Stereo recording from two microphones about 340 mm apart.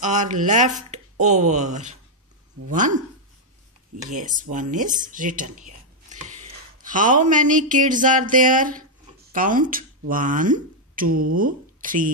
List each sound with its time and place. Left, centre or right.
0.0 s speech: right
4.0 s speech: right
6.8 s a sound: right